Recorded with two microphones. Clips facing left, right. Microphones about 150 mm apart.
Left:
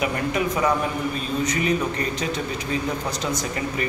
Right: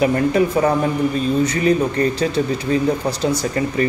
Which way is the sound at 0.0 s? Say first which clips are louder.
Right 8 dB; 35° right (ahead or behind).